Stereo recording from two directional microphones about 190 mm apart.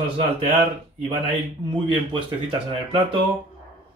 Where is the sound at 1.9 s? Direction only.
25° right (ahead or behind).